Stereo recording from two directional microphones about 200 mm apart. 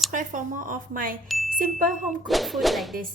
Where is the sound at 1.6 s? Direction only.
40° right (ahead or behind).